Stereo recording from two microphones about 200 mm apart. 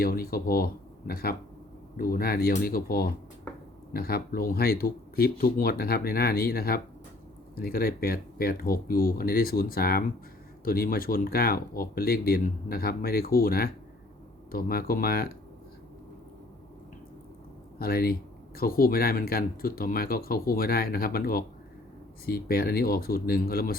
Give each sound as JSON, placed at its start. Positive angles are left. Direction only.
{"t": 0.0, "sound": "speech", "side_deg": 45}
{"t": 17.7, "sound": "speech", "side_deg": 50}